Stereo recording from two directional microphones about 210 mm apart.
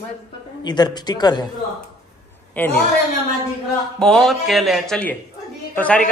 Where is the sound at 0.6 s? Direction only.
20° left (ahead or behind).